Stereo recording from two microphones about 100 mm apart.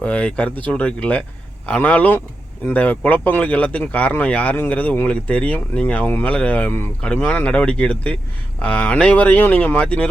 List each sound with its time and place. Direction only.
0.0 s speech: 15° left (ahead or behind)